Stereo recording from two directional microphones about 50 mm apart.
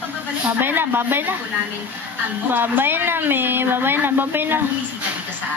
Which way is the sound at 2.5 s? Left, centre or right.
Right.